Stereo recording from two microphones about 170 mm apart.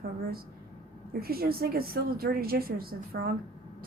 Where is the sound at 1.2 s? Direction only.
60° right (ahead or behind).